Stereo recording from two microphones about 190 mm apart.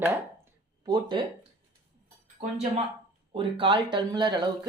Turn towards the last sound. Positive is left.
turn(degrees=-25)  # may be behind; listen again after turning